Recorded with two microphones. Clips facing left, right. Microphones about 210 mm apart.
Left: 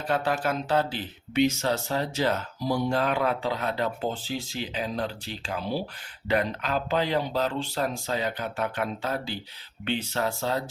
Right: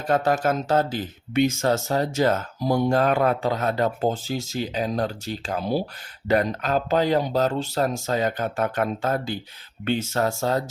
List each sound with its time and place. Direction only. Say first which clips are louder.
0.1 s speech: right 5 dB; 45° right (ahead or behind)